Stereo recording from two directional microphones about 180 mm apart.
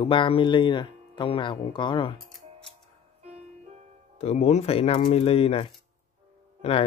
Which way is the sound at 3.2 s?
35° right (ahead or behind).